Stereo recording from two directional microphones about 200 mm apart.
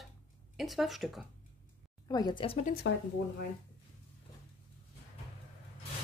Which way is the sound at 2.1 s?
20° left (ahead or behind).